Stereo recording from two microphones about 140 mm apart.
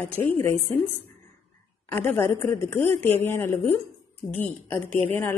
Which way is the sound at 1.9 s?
15° left (ahead or behind).